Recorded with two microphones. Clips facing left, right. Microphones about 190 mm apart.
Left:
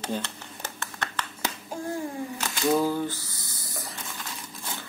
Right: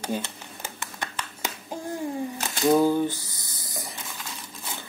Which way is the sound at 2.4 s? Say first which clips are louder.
Right 4 dB; 15° right (ahead or behind).